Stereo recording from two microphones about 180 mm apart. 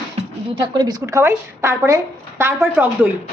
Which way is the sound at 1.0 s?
15° right (ahead or behind).